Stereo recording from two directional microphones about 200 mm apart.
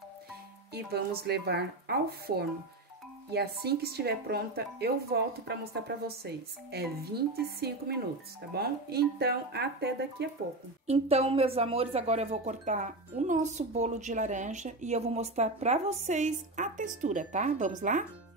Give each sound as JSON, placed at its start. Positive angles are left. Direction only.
{"t": 0.7, "sound": "speech", "side_deg": -55}
{"t": 10.9, "sound": "speech", "side_deg": -30}